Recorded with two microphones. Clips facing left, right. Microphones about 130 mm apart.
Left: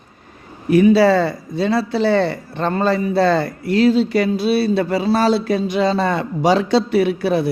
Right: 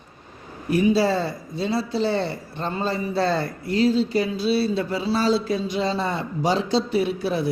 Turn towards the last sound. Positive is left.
turn(degrees=70)  # may be behind; listen again after turning